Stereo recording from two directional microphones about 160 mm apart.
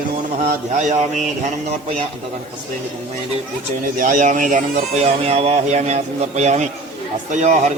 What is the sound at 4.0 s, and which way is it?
Speech, 55° right (ahead or behind).